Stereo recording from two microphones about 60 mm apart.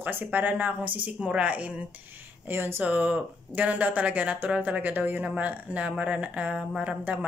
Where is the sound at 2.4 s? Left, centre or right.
Right.